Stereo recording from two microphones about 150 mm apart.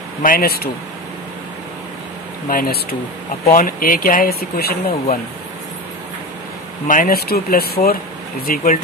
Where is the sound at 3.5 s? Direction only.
70° left (ahead or behind); by 5.0 s 85° left.